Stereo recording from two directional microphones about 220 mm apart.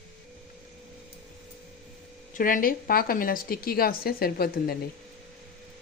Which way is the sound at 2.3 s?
35° left (ahead or behind).